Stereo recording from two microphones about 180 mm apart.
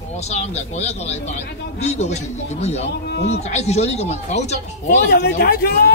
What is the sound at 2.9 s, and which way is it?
Speech, 65° left (ahead or behind).